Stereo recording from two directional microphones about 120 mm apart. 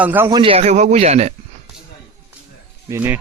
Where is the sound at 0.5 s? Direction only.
65° right (ahead or behind).